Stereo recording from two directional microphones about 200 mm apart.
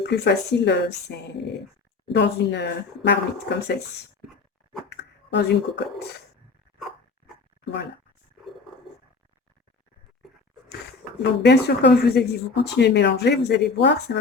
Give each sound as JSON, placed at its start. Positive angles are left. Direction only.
{"t": 0.0, "sound": "speech", "side_deg": 60}
{"t": 2.1, "sound": "speech", "side_deg": 60}
{"t": 4.9, "sound": "a sound", "side_deg": 60}
{"t": 7.6, "sound": "speech", "side_deg": 60}
{"t": 11.2, "sound": "speech", "side_deg": 60}